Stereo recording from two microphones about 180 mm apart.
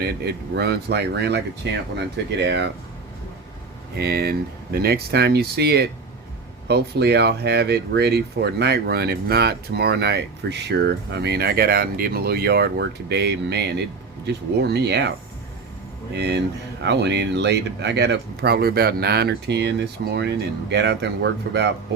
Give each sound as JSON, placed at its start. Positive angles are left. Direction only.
{"t": 0.0, "sound": "speech", "side_deg": -65}
{"t": 3.9, "sound": "speech", "side_deg": -60}
{"t": 16.1, "sound": "speech", "side_deg": -70}